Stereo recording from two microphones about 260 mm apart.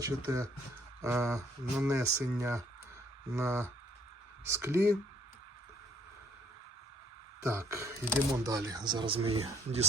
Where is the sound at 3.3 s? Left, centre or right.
Centre.